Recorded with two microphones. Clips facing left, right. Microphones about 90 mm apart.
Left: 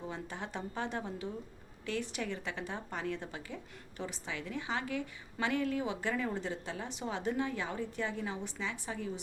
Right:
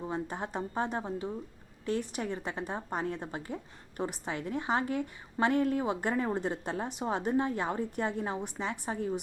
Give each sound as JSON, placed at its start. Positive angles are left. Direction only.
{"t": 0.1, "sound": "a woman's voice", "side_deg": -40}